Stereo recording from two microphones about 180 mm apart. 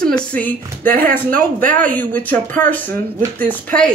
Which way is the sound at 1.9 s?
10° left (ahead or behind).